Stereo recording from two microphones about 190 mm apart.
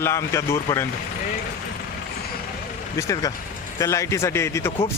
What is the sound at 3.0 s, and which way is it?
A man's voice, 15° left (ahead or behind).